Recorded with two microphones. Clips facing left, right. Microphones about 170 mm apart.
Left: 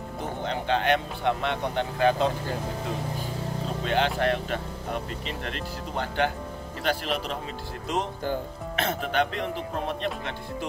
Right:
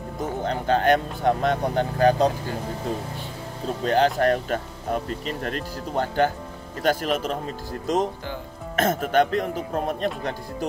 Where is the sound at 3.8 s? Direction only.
40° right (ahead or behind).